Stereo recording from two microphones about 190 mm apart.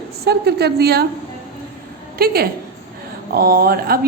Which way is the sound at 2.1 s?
55° right (ahead or behind).